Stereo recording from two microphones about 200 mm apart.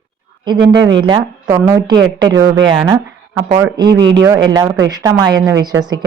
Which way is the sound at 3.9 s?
65° right (ahead or behind).